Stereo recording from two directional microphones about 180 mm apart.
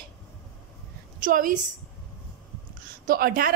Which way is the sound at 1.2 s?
50° right (ahead or behind).